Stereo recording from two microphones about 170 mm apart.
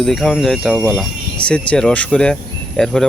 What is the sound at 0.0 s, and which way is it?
Speech, centre (ahead or behind).